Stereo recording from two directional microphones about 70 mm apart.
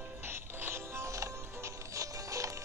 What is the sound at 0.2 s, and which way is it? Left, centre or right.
Music, right.